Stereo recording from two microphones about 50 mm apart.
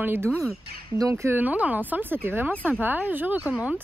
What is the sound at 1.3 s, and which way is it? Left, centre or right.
Speech, right.